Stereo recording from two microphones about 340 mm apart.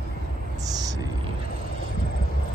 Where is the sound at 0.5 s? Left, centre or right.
Centre.